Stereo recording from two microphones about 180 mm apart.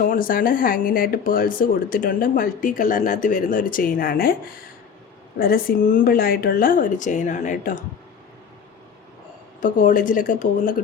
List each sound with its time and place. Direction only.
0.0 s speech: 50° left (ahead or behind)
5.4 s speech: 55° left (ahead or behind)
9.6 s speech: 45° left (ahead or behind)